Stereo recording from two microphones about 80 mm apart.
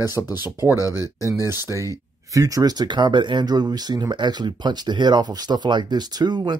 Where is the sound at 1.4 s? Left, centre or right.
Right.